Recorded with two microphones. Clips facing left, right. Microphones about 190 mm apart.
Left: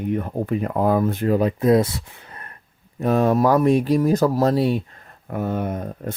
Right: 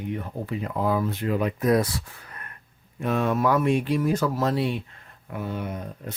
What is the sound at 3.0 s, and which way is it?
Speech, 40° left (ahead or behind).